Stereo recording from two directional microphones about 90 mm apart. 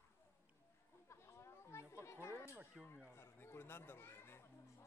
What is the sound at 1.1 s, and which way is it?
Chatter, 30° left (ahead or behind).